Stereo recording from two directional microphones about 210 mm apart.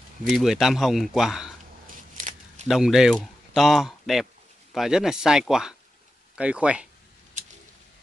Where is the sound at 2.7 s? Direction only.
Centre (ahead or behind).